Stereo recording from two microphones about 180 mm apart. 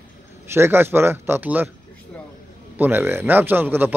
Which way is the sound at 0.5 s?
15° right (ahead or behind).